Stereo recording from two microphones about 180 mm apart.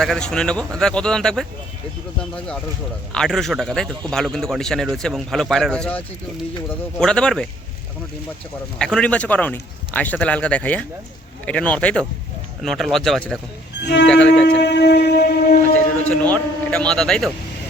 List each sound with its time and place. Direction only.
0.0 s a man's voice: 5° left (ahead or behind)
3.1 s a man's voice: 5° left (ahead or behind)
7.0 s a man's voice: 5° left (ahead or behind)
8.8 s a man's voice: 5° left (ahead or behind)
13.8 s wind instrument: 75° left (ahead or behind)
14.1 s a man's voice: 5° left (ahead or behind)
14.6 s wind instrument: 70° left (ahead or behind)
15.7 s a man's voice: 10° left (ahead or behind)